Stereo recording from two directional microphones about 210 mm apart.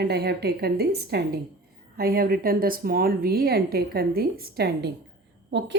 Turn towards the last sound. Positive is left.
turn(degrees=-55)  # may be behind; listen again after turning